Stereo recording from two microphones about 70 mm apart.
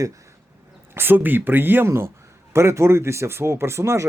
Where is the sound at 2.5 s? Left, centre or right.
Right.